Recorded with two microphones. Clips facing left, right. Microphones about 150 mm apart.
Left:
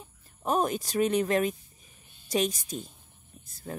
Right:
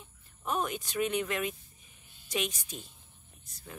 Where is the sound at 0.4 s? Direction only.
40° left (ahead or behind).